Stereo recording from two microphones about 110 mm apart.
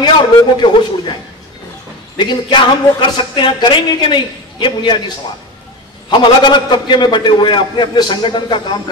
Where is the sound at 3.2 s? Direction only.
45° left (ahead or behind).